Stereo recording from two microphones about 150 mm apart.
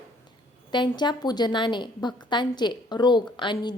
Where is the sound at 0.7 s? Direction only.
30° left (ahead or behind).